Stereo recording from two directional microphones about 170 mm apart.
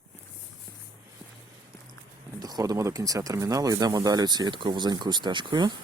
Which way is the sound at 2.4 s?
20° right (ahead or behind).